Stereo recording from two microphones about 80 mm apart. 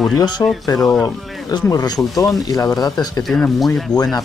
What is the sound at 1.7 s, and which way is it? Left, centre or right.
Speech, left.